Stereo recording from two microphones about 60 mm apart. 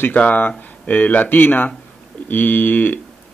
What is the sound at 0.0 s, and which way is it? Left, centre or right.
Speech, left.